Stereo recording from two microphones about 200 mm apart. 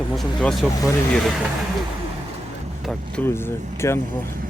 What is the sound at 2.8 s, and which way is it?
Speech, 5° left (ahead or behind).